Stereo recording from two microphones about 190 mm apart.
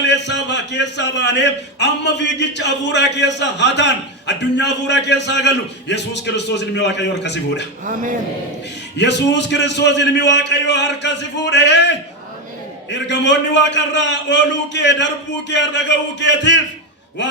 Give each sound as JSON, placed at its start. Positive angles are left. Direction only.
{"t": 0.0, "sound": "a man's voice", "side_deg": 65}
{"t": 9.0, "sound": "a man's voice", "side_deg": 65}